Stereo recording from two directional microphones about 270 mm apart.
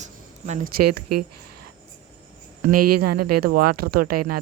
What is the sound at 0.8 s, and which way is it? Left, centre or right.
Speech, right.